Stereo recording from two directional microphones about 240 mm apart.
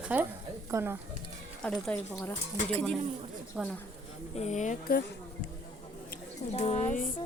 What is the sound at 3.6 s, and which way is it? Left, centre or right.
Speech, centre.